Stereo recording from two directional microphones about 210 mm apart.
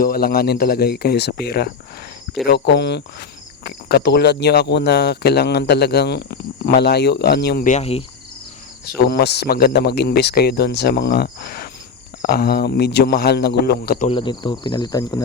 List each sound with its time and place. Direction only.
0.0 s cricket: 45° left (ahead or behind)
7.7 s insect: 30° left (ahead or behind)
8.9 s cricket: 50° left (ahead or behind)
14.1 s insect: 25° left (ahead or behind)